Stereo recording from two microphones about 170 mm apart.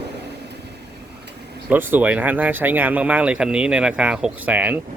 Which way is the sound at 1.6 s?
10° right (ahead or behind).